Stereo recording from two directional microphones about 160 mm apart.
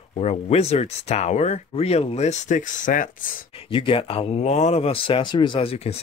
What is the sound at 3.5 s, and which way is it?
Speech, 35° left (ahead or behind).